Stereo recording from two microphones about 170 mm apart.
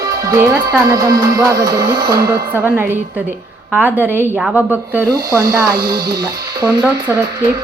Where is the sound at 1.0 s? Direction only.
20° right (ahead or behind).